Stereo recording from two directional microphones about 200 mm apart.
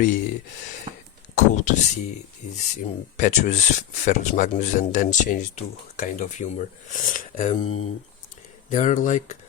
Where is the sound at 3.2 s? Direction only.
35° left (ahead or behind).